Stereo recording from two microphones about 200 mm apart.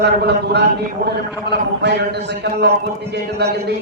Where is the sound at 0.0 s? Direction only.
55° right (ahead or behind).